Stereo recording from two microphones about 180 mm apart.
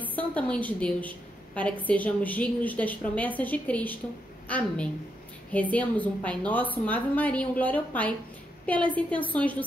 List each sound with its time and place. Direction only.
0.0 s a woman's voice: 10° left (ahead or behind)